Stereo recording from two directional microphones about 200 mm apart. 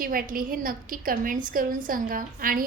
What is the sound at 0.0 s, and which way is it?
A woman's voice, 45° right (ahead or behind).